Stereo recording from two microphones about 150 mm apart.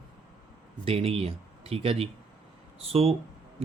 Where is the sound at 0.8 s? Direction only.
40° right (ahead or behind).